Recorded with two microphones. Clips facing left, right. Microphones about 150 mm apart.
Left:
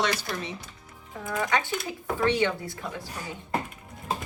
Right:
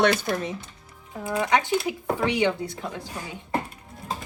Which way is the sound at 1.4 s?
20° right (ahead or behind).